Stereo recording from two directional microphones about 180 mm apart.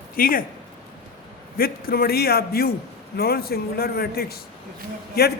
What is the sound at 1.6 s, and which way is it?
A man's voice, 55° left (ahead or behind).